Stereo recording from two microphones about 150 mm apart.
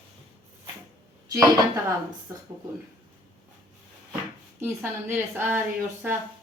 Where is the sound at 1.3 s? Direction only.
20° right (ahead or behind).